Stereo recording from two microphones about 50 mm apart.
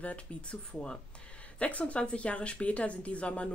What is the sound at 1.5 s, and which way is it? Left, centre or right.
Speech, left.